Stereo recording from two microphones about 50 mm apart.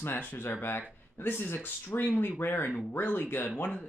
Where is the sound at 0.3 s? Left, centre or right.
Left.